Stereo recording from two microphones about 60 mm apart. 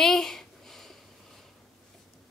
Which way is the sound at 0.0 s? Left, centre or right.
Centre.